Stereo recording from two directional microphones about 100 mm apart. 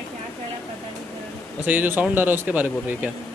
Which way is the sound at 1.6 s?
15° right (ahead or behind).